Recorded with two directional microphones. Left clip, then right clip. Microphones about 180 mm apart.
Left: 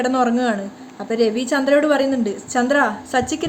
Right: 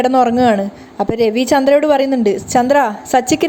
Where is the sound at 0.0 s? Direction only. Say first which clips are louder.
Right 7 dB; 35° right (ahead or behind).